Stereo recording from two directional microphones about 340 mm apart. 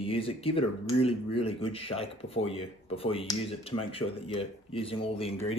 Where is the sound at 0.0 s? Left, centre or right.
Centre.